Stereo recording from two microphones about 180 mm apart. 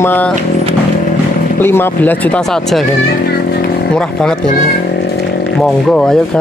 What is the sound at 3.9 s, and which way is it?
Speech, 5° left (ahead or behind).